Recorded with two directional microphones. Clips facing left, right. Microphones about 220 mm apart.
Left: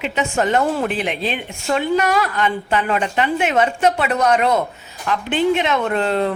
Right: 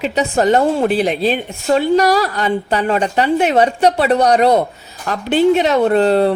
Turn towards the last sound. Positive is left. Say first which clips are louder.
# right 7 dB
turn(degrees=-35)  # may be behind; listen again after turning